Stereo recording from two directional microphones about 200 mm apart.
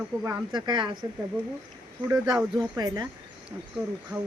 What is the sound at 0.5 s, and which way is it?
Speech, 20° right (ahead or behind).